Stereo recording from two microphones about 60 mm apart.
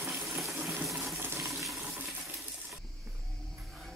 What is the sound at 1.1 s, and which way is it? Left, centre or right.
Water, right.